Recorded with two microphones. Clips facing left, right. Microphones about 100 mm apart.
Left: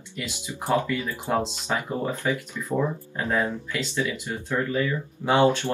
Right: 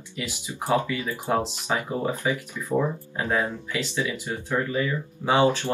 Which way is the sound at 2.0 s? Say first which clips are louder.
Even; 15° right (ahead or behind).